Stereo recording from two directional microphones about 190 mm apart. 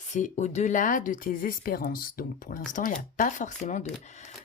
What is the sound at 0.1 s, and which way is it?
Speech, 40° left (ahead or behind).